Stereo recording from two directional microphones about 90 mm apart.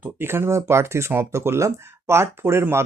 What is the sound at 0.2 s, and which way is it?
Speech, 25° right (ahead or behind).